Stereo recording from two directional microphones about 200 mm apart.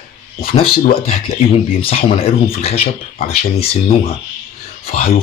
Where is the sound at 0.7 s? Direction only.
50° left (ahead or behind).